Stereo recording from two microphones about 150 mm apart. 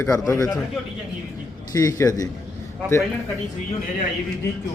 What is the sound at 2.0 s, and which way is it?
Speech, 25° left (ahead or behind).